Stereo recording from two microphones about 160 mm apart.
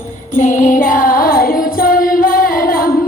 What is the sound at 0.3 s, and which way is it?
Music, 55° left (ahead or behind).